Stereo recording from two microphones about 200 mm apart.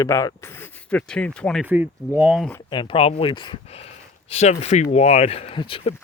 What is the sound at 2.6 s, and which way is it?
Speech, 25° left (ahead or behind).